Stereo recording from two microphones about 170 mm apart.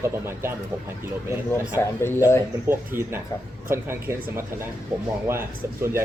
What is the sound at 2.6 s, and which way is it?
Speech, 15° right (ahead or behind).